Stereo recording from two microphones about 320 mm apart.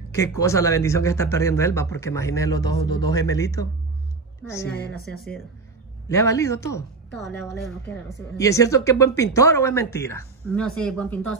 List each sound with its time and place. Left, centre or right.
0.1 s speech: centre
4.6 s a woman's voice: left
6.0 s speech: centre
7.1 s a woman's voice: left
7.4 s speech: centre